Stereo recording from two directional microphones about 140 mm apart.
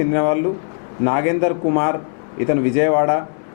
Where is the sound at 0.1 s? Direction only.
20° left (ahead or behind).